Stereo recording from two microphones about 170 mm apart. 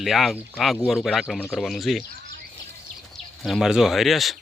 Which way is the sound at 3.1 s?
Centre (ahead or behind).